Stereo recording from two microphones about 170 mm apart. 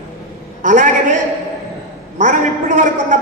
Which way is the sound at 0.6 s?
45° right (ahead or behind).